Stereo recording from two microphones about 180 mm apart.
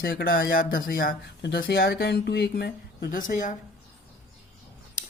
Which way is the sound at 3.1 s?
45° left (ahead or behind).